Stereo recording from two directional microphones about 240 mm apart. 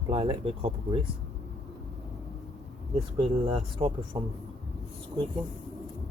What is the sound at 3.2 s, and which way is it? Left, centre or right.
Speech, right.